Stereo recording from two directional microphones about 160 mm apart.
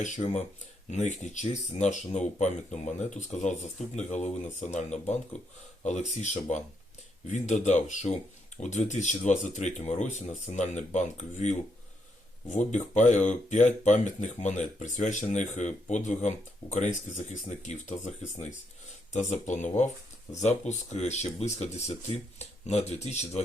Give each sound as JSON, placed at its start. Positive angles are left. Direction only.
{"t": 0.0, "sound": "speech", "side_deg": 45}